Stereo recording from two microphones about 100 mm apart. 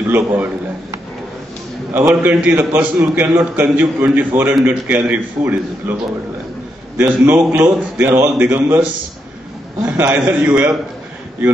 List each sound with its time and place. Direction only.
0.1 s a man's voice: 20° right (ahead or behind)
2.0 s a man's voice: 15° right (ahead or behind)
7.0 s a man's voice: 10° right (ahead or behind)
10.0 s a man's voice: 10° right (ahead or behind)